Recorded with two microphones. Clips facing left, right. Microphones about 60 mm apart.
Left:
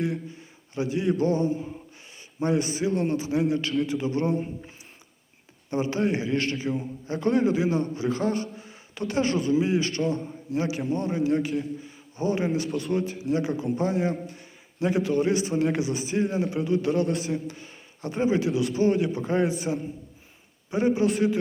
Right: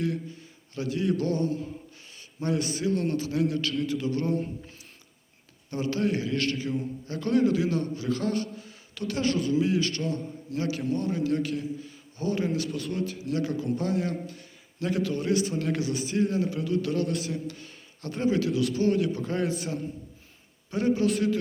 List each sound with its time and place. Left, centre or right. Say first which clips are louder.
0.0 s a man's voice: left 1 dB; left
5.7 s a man's voice: left 2 dB; left
14.3 s a sound: left 1 dB; left
15.2 s a man's voice: left 3 dB; centre